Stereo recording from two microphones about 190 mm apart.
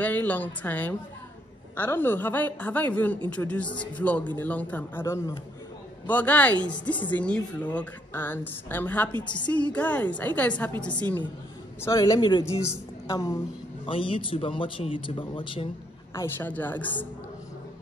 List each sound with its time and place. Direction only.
0.0 s a woman's voice: 10° left (ahead or behind)
6.7 s speech: 25° left (ahead or behind)
7.1 s a woman's voice: 5° left (ahead or behind); by 15.7 s 25° left (ahead or behind)
16.2 s a woman's voice: 10° left (ahead or behind)